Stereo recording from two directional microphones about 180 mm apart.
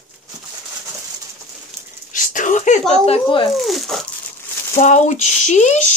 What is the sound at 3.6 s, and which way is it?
Speech, centre (ahead or behind).